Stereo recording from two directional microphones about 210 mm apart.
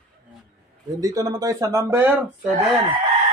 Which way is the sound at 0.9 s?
15° right (ahead or behind).